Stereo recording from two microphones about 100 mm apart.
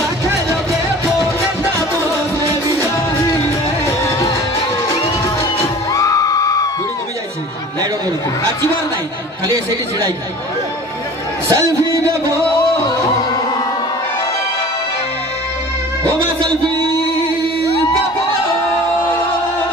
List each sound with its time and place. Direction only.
3.8 s music: 30° left (ahead or behind)
5.6 s music: 35° left (ahead or behind)
11.4 s a sound: 30° right (ahead or behind)
12.5 s music: 40° left (ahead or behind)